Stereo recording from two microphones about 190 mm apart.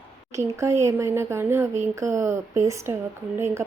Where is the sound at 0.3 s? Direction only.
15° right (ahead or behind).